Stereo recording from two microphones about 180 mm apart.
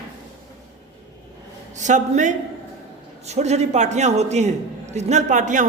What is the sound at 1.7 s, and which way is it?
A man's voice, 40° right (ahead or behind).